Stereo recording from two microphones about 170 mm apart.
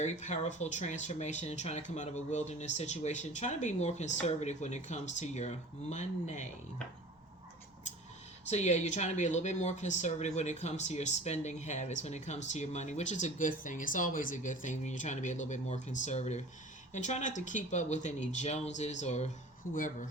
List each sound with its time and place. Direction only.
0.0 s speech: 45° left (ahead or behind)
8.4 s speech: 40° left (ahead or behind)
19.7 s speech: 50° left (ahead or behind)